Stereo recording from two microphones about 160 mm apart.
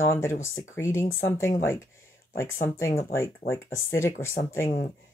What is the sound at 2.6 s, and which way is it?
Speech, 15° left (ahead or behind).